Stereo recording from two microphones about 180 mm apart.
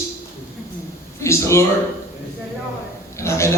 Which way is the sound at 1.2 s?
15° left (ahead or behind).